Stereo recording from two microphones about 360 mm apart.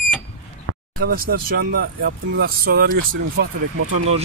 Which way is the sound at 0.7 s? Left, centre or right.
Right.